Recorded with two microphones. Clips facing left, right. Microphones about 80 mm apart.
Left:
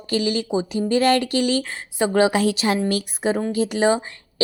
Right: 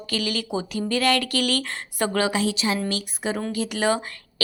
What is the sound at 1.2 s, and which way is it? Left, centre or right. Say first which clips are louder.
Speech: left 4 dB; right.